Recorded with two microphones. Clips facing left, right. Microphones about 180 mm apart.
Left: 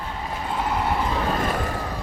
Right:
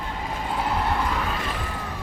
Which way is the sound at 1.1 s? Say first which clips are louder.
Left 3 dB; 30° left (ahead or behind).